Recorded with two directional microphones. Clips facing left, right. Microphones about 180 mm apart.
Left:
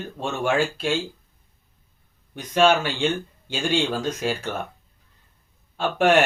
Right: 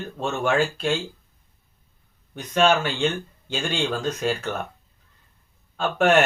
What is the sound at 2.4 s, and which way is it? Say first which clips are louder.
Speech: left 1 dB; 10° left (ahead or behind).